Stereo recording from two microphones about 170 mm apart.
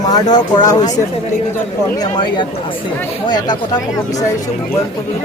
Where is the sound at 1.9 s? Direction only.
25° left (ahead or behind).